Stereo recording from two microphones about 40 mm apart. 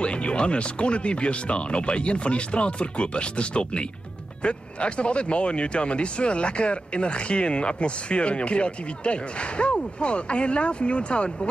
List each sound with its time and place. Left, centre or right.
0.0 s speech: left